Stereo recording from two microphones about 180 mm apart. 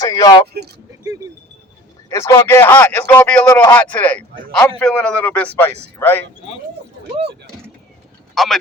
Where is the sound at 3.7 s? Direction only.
10° left (ahead or behind).